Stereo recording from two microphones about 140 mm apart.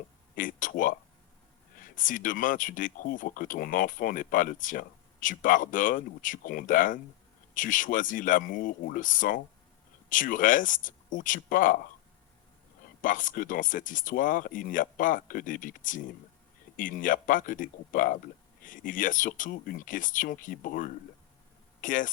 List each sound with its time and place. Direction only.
0.3 s speech: 75° left (ahead or behind)
13.0 s speech: 70° left (ahead or behind); by 20.9 s 90° left
21.8 s speech: 70° left (ahead or behind)